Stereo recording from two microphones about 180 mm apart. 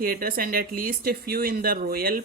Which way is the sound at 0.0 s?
55° right (ahead or behind).